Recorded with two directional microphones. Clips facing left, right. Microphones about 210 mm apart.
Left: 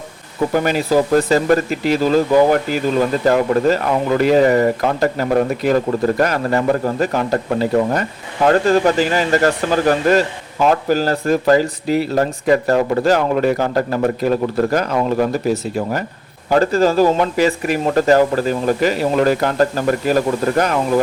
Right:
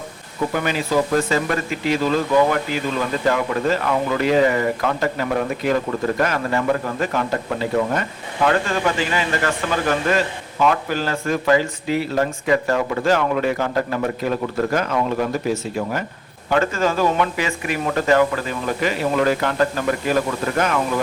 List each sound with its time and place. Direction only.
0.5 s speech: 40° left (ahead or behind)